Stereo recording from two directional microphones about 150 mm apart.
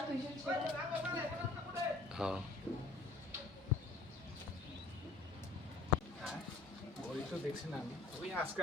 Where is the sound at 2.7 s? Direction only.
15° left (ahead or behind).